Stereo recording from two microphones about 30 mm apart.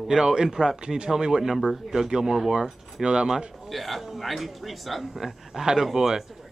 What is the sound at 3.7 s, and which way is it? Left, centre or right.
A woman's voice, centre.